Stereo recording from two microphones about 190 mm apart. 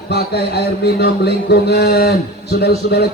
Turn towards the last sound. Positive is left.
turn(degrees=60)  # may be behind; listen again after turning